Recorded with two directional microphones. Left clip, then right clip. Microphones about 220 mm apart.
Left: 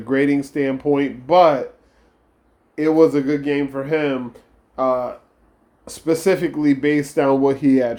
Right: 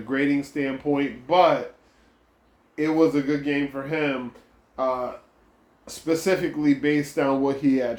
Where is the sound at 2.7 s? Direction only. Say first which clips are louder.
Left 6 dB; 40° left (ahead or behind).